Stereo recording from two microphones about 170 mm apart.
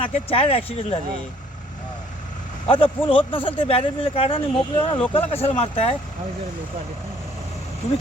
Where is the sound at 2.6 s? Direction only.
30° left (ahead or behind).